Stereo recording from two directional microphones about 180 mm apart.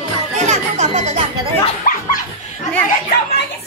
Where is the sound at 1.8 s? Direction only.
50° left (ahead or behind).